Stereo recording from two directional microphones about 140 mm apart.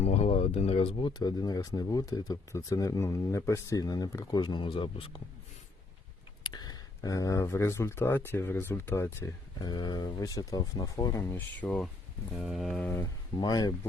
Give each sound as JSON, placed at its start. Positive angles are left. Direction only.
{"t": 0.0, "sound": "speech", "side_deg": 50}
{"t": 6.4, "sound": "speech", "side_deg": 30}
{"t": 9.6, "sound": "speech", "side_deg": 30}
{"t": 12.3, "sound": "livestock", "side_deg": 0}
{"t": 13.4, "sound": "speech", "side_deg": 30}